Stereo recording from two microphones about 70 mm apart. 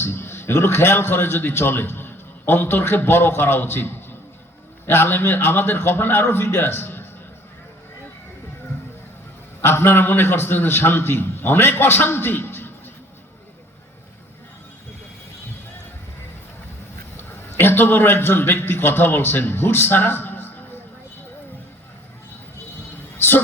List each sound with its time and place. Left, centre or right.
0.0 s a man's voice: left
9.6 s a man's voice: left
17.2 s a man's voice: left
23.1 s a sound: left